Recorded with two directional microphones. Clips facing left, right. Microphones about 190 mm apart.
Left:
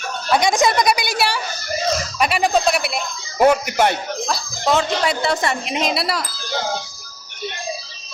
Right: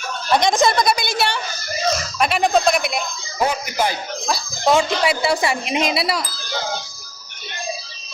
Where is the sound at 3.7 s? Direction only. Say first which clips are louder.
Left 4 dB; 70° left (ahead or behind).